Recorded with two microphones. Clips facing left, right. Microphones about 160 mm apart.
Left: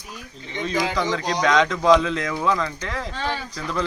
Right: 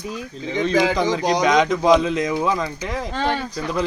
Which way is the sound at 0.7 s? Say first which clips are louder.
Right 6 dB; 90° right.